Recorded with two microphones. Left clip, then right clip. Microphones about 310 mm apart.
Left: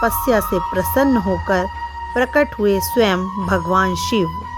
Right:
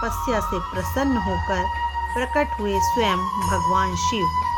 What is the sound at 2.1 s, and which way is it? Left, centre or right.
Speech, left.